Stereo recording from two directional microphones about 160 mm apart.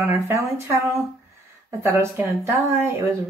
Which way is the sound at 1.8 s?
15° right (ahead or behind).